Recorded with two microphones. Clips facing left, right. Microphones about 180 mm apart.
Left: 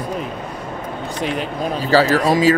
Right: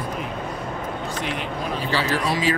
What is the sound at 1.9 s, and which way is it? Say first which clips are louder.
Speech: left 10 dB; 40° left (ahead or behind).